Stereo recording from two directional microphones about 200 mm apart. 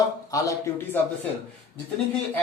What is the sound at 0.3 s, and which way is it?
Speech, 15° left (ahead or behind).